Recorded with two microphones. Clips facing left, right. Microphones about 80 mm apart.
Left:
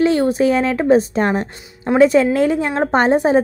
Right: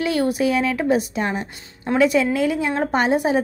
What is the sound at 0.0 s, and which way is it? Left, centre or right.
A woman's voice, left.